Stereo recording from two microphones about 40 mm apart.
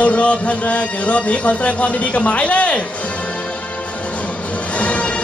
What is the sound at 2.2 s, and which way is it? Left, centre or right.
Speech, left.